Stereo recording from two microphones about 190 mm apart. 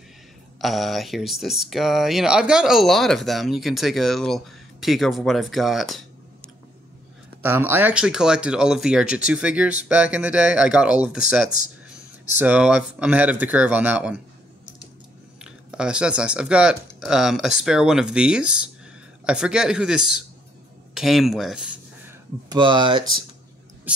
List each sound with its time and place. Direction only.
0.6 s speech: centre (ahead or behind)
7.4 s speech: 10° right (ahead or behind)
15.4 s speech: 5° right (ahead or behind)
22.5 s speech: 25° right (ahead or behind)